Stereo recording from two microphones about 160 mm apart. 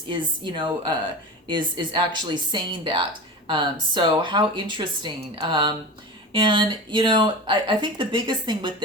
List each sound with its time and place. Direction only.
0.1 s speech: 30° right (ahead or behind)